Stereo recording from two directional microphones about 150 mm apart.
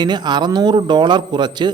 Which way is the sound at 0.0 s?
30° right (ahead or behind).